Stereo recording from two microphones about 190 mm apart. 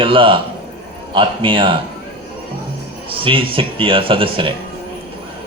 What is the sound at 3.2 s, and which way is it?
A man's voice, 25° right (ahead or behind).